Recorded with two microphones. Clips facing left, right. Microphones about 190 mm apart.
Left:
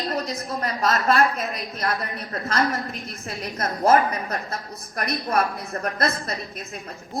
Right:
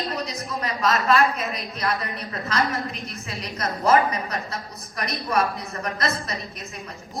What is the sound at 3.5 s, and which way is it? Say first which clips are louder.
Speech: left 2 dB; 55° left (ahead or behind).